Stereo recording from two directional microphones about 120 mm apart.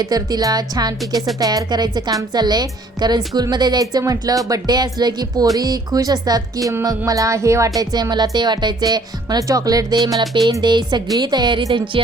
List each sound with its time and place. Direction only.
0.0 s speech: 30° right (ahead or behind)